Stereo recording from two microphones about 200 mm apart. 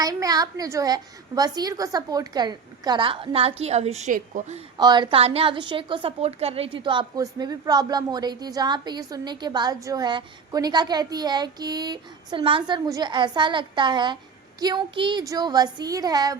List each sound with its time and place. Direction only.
0.0 s a woman's voice: 20° right (ahead or behind); by 4.6 s 40° right (ahead or behind)
4.8 s a woman's voice: 20° right (ahead or behind)